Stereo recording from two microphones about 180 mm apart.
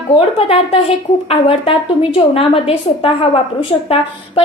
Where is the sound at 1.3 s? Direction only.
30° left (ahead or behind).